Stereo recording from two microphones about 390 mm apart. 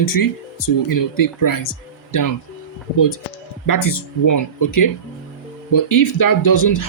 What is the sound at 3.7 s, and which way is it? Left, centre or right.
Speech, left.